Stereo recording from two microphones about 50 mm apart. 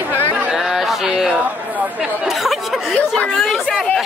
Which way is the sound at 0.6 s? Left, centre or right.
Centre.